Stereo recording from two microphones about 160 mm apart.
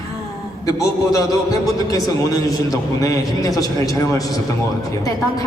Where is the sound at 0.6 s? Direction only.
20° left (ahead or behind).